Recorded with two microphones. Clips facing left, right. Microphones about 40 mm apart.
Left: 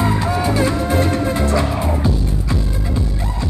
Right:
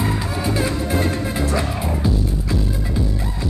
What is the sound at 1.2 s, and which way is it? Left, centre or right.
Music, centre.